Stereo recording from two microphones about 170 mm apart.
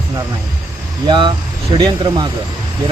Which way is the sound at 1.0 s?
30° right (ahead or behind).